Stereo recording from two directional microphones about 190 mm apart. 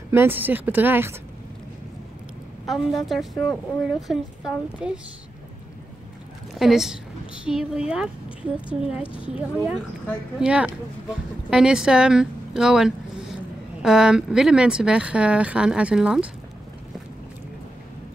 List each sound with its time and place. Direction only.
0.1 s speech: 10° right (ahead or behind)
2.6 s speech: centre (ahead or behind)
6.6 s speech: centre (ahead or behind)
9.0 s speech: 25° left (ahead or behind)
9.3 s speech: 5° right (ahead or behind)